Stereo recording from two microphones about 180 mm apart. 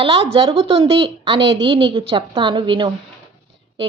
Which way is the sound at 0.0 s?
30° right (ahead or behind).